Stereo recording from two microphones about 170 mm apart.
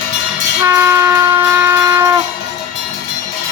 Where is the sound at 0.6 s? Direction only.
15° right (ahead or behind).